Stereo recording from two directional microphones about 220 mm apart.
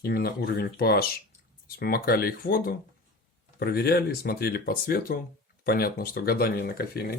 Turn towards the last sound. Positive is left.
turn(degrees=45)  # may be behind; listen again after turning